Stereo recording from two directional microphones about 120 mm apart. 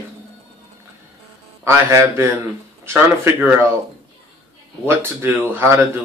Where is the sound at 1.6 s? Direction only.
20° right (ahead or behind).